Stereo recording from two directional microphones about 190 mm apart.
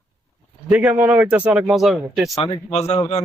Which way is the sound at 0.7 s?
5° right (ahead or behind).